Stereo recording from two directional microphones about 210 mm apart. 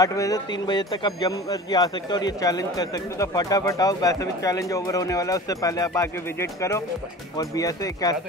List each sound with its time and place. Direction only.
0.0 s speech: 15° left (ahead or behind)